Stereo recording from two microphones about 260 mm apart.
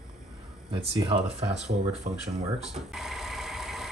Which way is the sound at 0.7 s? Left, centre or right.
Right.